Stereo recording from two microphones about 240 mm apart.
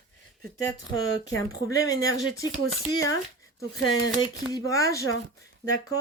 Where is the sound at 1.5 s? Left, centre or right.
Centre.